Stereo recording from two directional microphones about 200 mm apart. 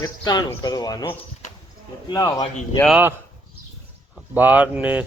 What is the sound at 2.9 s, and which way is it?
Speech, 10° right (ahead or behind).